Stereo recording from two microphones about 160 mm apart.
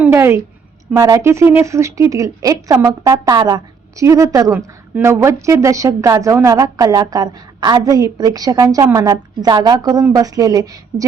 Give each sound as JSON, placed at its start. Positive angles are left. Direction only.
{"t": 0.0, "sound": "a woman's voice", "side_deg": -15}